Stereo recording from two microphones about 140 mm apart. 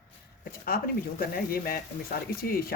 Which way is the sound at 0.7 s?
90° left.